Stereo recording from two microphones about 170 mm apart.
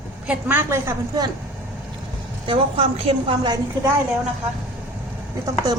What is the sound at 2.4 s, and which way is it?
Speech, 30° right (ahead or behind).